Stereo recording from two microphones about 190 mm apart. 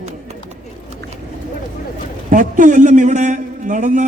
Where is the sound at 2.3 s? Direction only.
45° right (ahead or behind).